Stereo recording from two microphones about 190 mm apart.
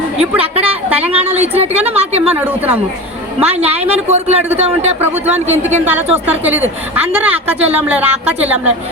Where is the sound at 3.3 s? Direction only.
35° right (ahead or behind).